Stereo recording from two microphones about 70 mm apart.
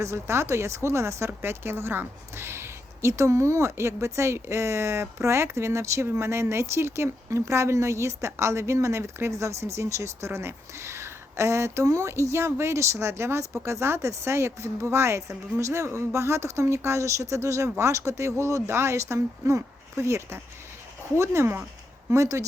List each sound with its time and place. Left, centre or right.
0.0 s speech: right